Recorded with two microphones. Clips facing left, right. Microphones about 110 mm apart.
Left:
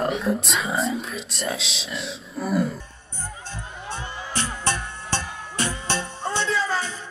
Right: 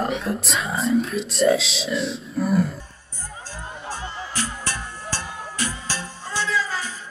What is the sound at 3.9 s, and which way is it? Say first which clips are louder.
Music: left 1 dB; 25° left (ahead or behind).